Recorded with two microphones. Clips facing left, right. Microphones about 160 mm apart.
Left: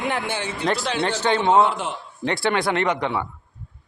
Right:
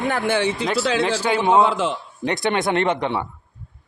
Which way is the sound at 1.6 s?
90° right.